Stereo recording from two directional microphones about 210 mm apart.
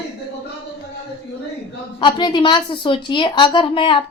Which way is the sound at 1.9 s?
20° left (ahead or behind).